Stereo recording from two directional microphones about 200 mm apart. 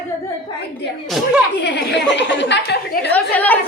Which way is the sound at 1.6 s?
60° left (ahead or behind).